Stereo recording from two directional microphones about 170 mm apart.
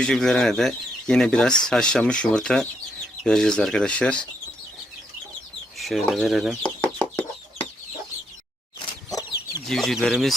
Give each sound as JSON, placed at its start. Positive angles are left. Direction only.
{"t": 0.0, "sound": "speech", "side_deg": 5}
{"t": 5.7, "sound": "chicken", "side_deg": 0}
{"t": 8.8, "sound": "chicken", "side_deg": 20}
{"t": 9.6, "sound": "speech", "side_deg": 0}